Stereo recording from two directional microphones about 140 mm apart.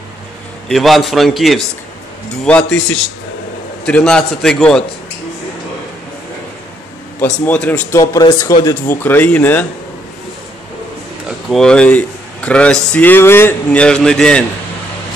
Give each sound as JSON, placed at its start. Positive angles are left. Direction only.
{"t": 0.7, "sound": "a man's voice", "side_deg": 0}
{"t": 7.4, "sound": "speech", "side_deg": 10}
{"t": 7.9, "sound": "speech", "side_deg": 25}
{"t": 11.2, "sound": "speech", "side_deg": 5}